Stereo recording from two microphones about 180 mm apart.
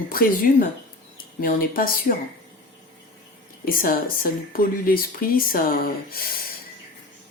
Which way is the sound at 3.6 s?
55° left (ahead or behind).